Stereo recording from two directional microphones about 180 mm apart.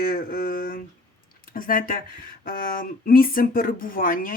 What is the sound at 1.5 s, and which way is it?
Speech, 50° left (ahead or behind).